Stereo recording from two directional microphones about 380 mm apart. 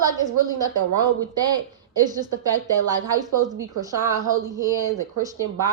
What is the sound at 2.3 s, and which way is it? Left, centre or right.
Speech, right.